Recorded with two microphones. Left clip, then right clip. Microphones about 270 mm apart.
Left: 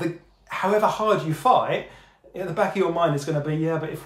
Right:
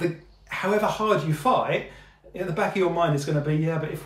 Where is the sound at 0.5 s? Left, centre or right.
Centre.